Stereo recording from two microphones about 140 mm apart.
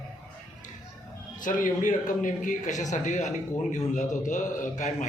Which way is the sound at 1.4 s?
70° left (ahead or behind).